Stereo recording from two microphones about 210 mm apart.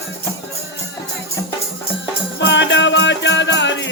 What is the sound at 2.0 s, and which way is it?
Music, 60° left (ahead or behind).